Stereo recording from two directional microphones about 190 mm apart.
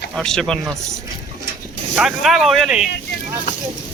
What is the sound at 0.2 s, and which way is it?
Speech, 5° left (ahead or behind).